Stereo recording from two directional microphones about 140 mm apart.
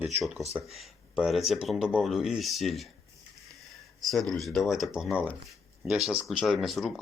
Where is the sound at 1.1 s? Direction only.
Centre (ahead or behind).